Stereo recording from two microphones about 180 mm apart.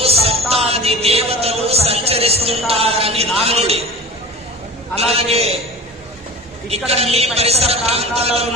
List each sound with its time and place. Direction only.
0.0 s music: 35° right (ahead or behind)
3.3 s a sound: 35° right (ahead or behind)
4.9 s a man's voice: 35° right (ahead or behind)
6.7 s a man's voice: 35° right (ahead or behind)